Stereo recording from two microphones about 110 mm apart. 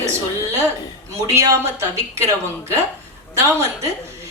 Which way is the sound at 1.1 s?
30° right (ahead or behind).